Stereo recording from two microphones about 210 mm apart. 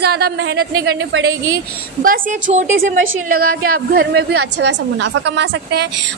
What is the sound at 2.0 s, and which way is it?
A woman's voice, 40° right (ahead or behind).